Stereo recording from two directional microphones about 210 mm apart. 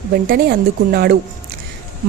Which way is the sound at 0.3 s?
45° right (ahead or behind).